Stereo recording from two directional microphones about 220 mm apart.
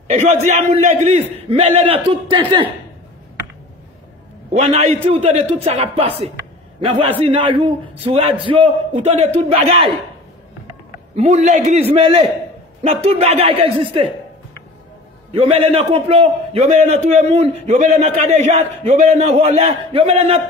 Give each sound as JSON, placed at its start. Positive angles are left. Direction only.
{"t": 0.1, "sound": "a man's voice", "side_deg": -30}
{"t": 4.5, "sound": "a man's voice", "side_deg": -30}
{"t": 11.1, "sound": "a man's voice", "side_deg": -30}
{"t": 15.3, "sound": "a man's voice", "side_deg": -25}